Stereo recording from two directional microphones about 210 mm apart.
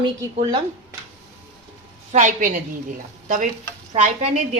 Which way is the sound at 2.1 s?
35° right (ahead or behind).